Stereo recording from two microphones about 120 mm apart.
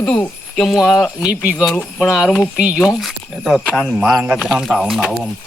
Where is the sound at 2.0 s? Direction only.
5° right (ahead or behind).